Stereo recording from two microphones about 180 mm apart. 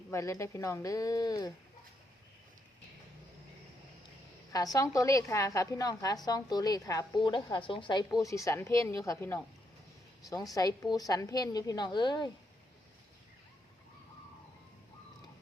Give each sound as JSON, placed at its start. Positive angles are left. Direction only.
{"t": 0.1, "sound": "a woman's voice", "side_deg": 15}
{"t": 4.5, "sound": "a woman's voice", "side_deg": 20}